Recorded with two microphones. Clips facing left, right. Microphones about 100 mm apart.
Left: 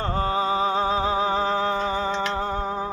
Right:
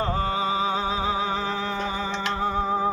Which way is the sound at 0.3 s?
40° left (ahead or behind).